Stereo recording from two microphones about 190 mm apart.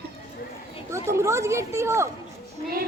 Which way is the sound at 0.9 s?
15° right (ahead or behind).